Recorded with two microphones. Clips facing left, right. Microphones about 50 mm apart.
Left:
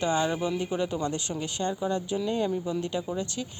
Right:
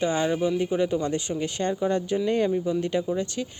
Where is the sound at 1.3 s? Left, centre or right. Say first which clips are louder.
Right 4 dB; centre.